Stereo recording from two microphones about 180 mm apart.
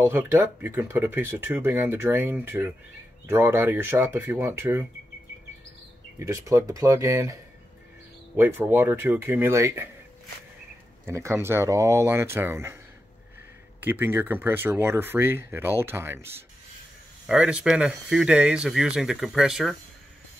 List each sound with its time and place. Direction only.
0.0 s speech: 10° right (ahead or behind)
6.1 s speech: 15° right (ahead or behind)
8.4 s speech: 10° right (ahead or behind)
11.1 s speech: 15° right (ahead or behind)
13.7 s speech: 10° right (ahead or behind)